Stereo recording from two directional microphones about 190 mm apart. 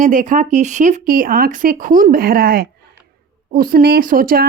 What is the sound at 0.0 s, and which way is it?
A woman's voice, 40° right (ahead or behind).